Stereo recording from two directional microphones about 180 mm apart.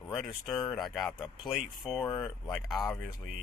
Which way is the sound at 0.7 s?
Centre (ahead or behind).